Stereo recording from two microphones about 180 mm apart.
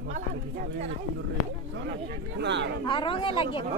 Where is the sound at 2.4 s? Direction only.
75° right (ahead or behind).